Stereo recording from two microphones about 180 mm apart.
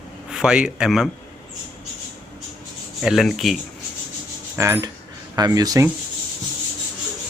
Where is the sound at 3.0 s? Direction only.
Centre (ahead or behind).